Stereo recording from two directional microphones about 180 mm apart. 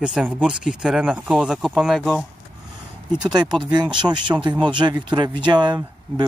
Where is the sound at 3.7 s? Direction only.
25° right (ahead or behind).